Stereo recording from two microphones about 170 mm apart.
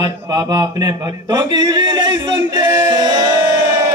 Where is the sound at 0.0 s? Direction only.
20° right (ahead or behind).